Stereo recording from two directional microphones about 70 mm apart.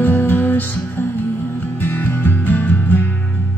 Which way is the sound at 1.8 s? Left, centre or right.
Left.